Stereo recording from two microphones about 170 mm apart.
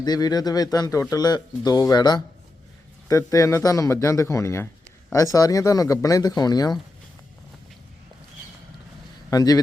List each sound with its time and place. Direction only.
0.0 s speech: 25° left (ahead or behind)
9.3 s speech: 20° left (ahead or behind)